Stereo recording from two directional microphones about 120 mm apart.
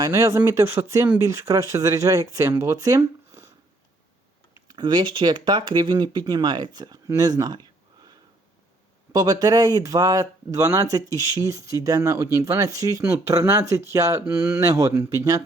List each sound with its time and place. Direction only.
0.0 s speech: 25° right (ahead or behind)
4.7 s speech: 40° right (ahead or behind)
9.1 s speech: 30° right (ahead or behind)